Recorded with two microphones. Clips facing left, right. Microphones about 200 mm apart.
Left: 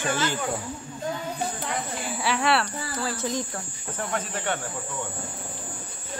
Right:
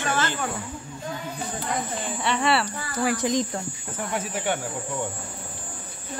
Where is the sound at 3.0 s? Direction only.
15° right (ahead or behind).